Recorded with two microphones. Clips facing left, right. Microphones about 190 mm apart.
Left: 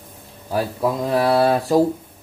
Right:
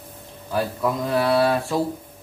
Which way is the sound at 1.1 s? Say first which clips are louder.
Left 2 dB; 40° left (ahead or behind).